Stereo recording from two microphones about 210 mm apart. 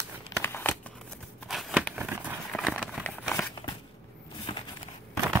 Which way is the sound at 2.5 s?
Centre (ahead or behind).